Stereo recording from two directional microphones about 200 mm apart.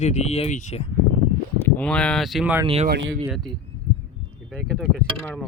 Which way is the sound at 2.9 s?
65° right (ahead or behind).